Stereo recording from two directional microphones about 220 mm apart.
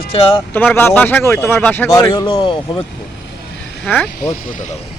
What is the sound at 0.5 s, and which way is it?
A man's voice, 10° left (ahead or behind).